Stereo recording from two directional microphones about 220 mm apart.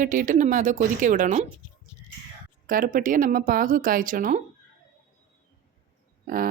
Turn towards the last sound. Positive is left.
turn(degrees=-40)  # may be behind; listen again after turning